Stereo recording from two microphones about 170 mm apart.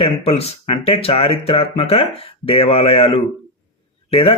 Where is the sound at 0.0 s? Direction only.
35° left (ahead or behind).